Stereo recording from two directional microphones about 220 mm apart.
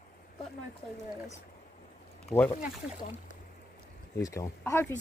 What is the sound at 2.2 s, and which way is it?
Speech, 5° left (ahead or behind).